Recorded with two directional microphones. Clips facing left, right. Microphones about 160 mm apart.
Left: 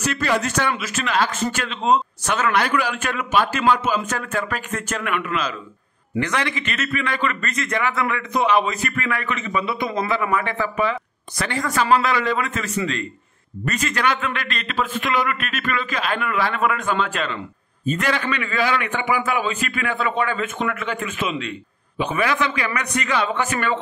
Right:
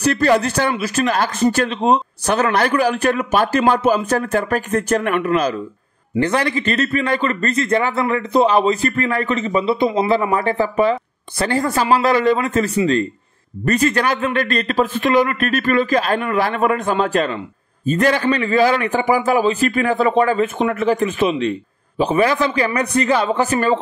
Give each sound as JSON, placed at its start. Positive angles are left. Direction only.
{"t": 0.0, "sound": "a man's voice", "side_deg": -35}